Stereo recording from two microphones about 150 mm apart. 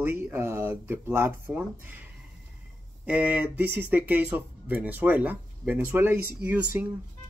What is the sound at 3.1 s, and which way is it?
Speech, 10° right (ahead or behind).